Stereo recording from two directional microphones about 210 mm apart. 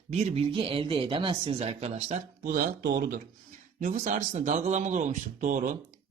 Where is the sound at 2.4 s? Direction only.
45° right (ahead or behind).